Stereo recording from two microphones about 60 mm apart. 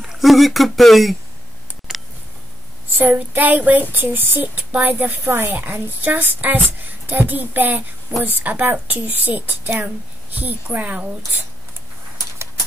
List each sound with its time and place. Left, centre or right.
0.0 s speech: centre
3.0 s a woman's voice: right